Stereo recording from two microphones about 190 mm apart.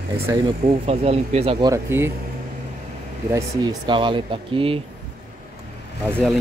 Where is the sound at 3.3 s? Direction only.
20° right (ahead or behind).